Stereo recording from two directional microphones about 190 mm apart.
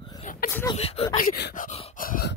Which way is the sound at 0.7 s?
30° left (ahead or behind).